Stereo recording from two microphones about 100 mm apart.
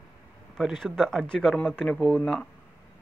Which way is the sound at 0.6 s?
Centre (ahead or behind).